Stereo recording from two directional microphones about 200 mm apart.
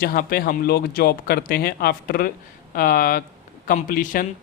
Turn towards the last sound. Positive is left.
turn(degrees=45)  # may be behind; listen again after turning